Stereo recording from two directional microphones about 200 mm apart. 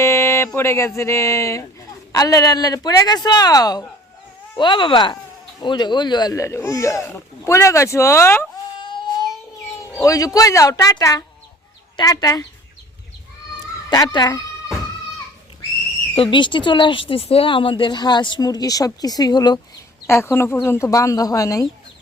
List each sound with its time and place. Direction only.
0.0 s a sound: 15° left (ahead or behind)
2.1 s speech: 15° left (ahead or behind)
8.8 s child singing: 25° left (ahead or behind)
9.9 s speech: 15° left (ahead or behind)
13.9 s a child's voice: 20° left (ahead or behind)
16.1 s speech: 25° left (ahead or behind)